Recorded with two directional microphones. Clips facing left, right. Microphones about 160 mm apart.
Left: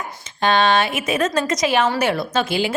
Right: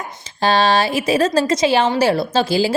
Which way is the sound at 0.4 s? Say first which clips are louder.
Right 1 dB; 35° right (ahead or behind).